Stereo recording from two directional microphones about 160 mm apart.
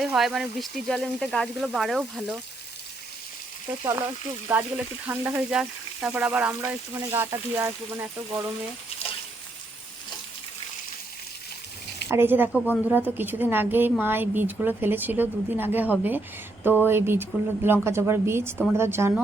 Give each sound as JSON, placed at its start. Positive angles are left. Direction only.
{"t": 0.0, "sound": "speech", "side_deg": 0}
{"t": 3.8, "sound": "speech", "side_deg": -15}
{"t": 5.4, "sound": "speech", "side_deg": -5}
{"t": 12.0, "sound": "speech", "side_deg": -15}